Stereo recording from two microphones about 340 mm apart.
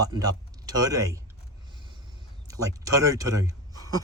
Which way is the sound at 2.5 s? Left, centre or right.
Centre.